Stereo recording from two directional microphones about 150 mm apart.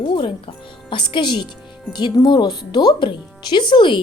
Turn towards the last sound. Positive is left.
turn(degrees=30)  # may be behind; listen again after turning